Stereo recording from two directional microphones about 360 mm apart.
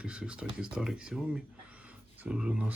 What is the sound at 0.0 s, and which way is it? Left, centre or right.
Speech, centre.